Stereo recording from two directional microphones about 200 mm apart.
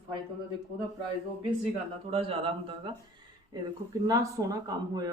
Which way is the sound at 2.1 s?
30° right (ahead or behind).